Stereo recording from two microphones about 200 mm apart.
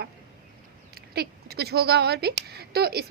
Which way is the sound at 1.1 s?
55° right (ahead or behind).